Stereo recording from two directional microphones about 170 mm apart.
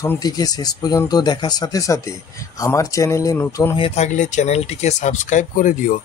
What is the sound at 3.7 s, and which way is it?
Speech, 35° left (ahead or behind).